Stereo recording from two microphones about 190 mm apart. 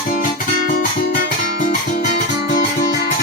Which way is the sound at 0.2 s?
45° left (ahead or behind).